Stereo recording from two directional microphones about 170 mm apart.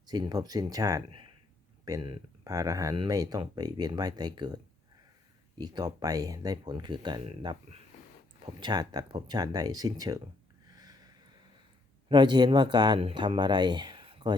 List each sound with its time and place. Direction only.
0.1 s speech: 25° right (ahead or behind)
5.5 s speech: 25° right (ahead or behind)
10.8 s a sound: 20° right (ahead or behind)
12.0 s speech: 25° right (ahead or behind)